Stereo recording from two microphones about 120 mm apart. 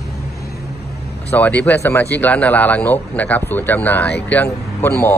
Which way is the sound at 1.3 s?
15° left (ahead or behind).